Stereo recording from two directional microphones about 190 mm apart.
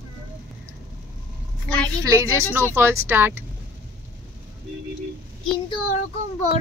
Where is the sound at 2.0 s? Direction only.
15° right (ahead or behind).